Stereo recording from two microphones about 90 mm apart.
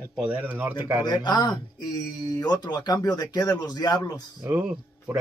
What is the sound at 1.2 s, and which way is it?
Speech, 55° left (ahead or behind).